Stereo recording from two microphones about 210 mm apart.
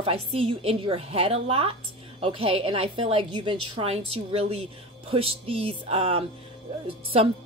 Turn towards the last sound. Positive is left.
turn(degrees=-30)  # may be behind; listen again after turning